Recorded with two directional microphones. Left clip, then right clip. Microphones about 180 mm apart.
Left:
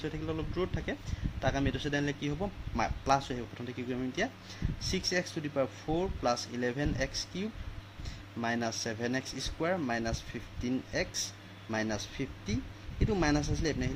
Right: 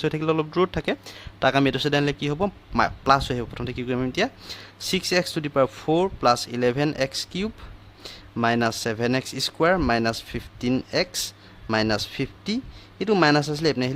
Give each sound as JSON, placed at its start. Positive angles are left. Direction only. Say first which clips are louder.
{"t": 0.0, "sound": "a man's voice", "louder": "right 14 dB", "side_deg": -60}